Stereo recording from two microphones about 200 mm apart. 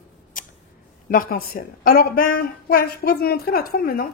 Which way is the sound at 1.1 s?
45° left (ahead or behind).